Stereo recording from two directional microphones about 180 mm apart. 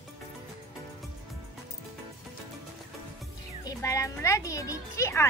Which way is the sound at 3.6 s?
15° left (ahead or behind).